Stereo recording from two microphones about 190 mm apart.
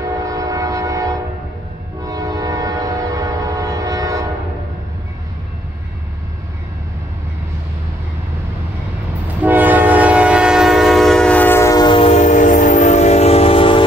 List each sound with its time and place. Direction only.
0.2 s train: 15° right (ahead or behind)
9.4 s train: 10° right (ahead or behind); by 13.8 s 30° left (ahead or behind)